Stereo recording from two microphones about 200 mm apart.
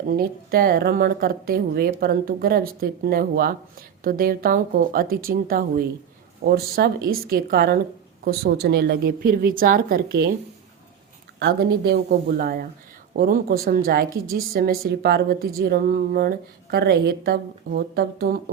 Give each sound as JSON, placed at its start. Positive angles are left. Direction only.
{"t": 0.1, "sound": "speech", "side_deg": -50}
{"t": 11.3, "sound": "speech", "side_deg": -55}